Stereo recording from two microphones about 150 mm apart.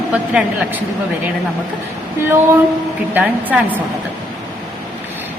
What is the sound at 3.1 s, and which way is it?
Speech, 10° right (ahead or behind).